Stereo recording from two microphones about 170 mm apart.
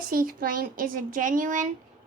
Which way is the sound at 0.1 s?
55° right (ahead or behind).